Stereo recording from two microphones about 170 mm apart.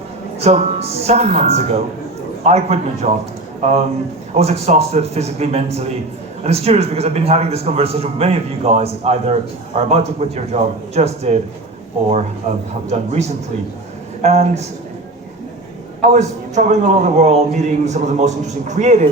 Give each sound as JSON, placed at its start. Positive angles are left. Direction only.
{"t": 0.3, "sound": "speech", "side_deg": -40}
{"t": 12.4, "sound": "speech", "side_deg": -40}
{"t": 16.0, "sound": "a man's voice", "side_deg": -40}